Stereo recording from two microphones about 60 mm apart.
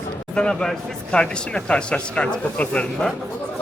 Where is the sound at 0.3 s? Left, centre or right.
Centre.